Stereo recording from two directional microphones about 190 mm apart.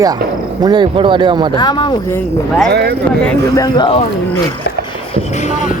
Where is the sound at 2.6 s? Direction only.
60° right (ahead or behind).